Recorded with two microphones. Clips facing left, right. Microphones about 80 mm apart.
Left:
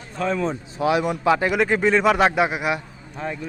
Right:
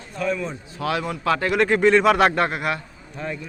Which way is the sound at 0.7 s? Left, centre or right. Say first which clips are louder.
Left 4 dB; centre.